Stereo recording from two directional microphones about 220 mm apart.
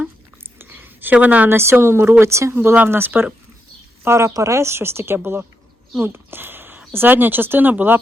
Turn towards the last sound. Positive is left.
turn(degrees=-10)  # may be behind; listen again after turning